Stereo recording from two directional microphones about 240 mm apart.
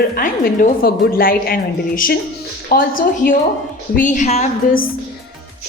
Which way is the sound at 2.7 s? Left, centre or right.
Left.